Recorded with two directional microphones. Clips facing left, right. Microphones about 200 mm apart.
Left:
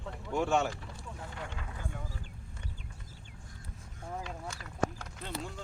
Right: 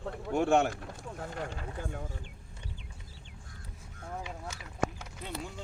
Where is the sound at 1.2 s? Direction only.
45° right (ahead or behind).